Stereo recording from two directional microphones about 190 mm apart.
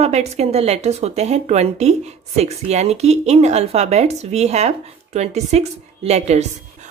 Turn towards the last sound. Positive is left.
turn(degrees=-35)  # may be behind; listen again after turning